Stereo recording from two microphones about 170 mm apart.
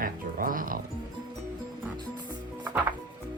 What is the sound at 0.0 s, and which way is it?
Music, 55° right (ahead or behind).